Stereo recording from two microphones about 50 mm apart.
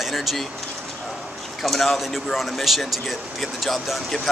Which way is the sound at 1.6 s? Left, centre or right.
Centre.